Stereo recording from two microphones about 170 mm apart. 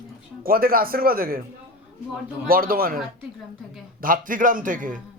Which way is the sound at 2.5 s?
60° right (ahead or behind).